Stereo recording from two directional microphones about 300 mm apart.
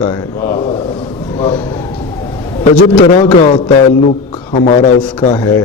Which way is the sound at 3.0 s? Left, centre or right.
Left.